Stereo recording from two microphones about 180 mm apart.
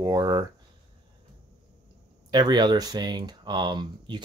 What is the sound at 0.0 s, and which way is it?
Speech, 20° right (ahead or behind).